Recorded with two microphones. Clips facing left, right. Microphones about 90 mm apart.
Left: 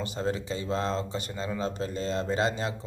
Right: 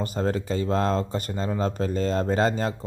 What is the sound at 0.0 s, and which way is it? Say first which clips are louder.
Speech: right 4 dB; 45° right (ahead or behind).